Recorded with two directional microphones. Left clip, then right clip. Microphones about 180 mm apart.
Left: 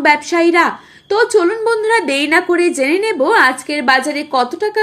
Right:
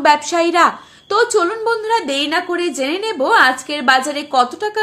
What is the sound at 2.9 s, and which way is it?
A woman's voice, 15° left (ahead or behind).